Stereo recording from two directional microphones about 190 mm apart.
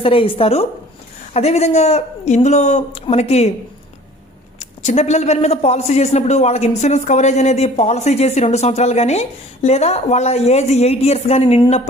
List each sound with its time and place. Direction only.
0.0 s a woman's voice: 30° left (ahead or behind)
4.6 s a man's voice: 35° left (ahead or behind)